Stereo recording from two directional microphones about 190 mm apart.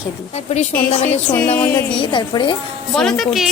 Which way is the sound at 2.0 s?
25° left (ahead or behind).